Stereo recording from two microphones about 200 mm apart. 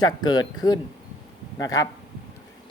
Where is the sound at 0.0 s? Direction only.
20° left (ahead or behind).